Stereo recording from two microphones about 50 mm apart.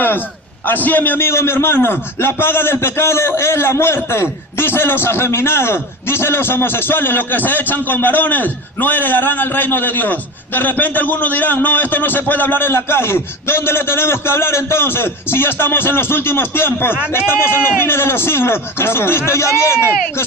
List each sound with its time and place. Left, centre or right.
0.6 s a man's voice: left
1.2 s a man's voice: left